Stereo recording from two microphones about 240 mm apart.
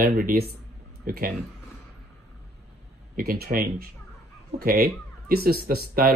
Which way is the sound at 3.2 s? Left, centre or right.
Right.